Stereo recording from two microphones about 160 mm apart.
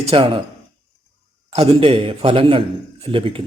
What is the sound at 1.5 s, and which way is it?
Speech, 35° right (ahead or behind).